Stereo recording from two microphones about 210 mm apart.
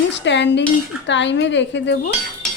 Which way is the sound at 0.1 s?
55° left (ahead or behind).